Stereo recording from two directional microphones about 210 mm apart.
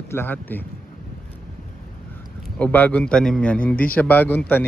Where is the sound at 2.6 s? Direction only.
5° left (ahead or behind).